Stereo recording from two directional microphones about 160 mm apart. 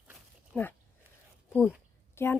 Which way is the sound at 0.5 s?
10° left (ahead or behind).